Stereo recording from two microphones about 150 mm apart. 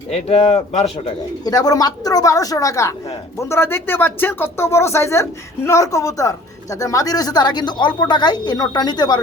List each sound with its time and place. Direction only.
0.1 s speech: 40° left (ahead or behind)
0.9 s speech: 30° left (ahead or behind)